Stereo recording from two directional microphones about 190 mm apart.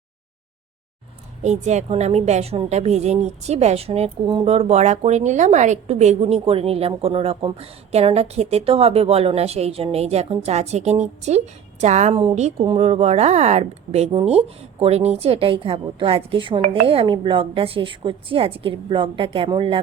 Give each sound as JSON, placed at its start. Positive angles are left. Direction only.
{"t": 1.4, "sound": "a woman's voice", "side_deg": -40}